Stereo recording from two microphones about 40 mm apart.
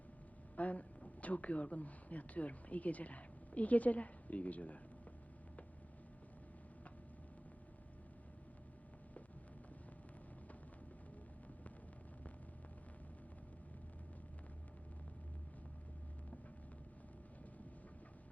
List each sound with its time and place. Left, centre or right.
0.5 s speech: left